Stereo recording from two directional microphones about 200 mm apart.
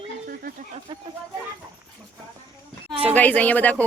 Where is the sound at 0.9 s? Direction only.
25° right (ahead or behind).